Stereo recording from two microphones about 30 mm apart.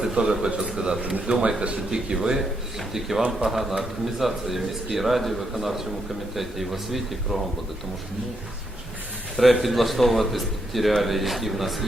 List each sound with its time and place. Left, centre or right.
0.0 s a man's voice: centre
1.9 s speech: right
2.4 s a man's voice: centre
9.3 s a man's voice: centre